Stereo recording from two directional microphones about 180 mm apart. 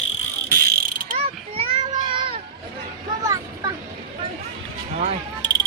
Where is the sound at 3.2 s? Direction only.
15° right (ahead or behind).